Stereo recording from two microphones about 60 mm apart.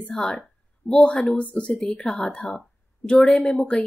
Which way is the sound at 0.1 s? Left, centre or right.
Centre.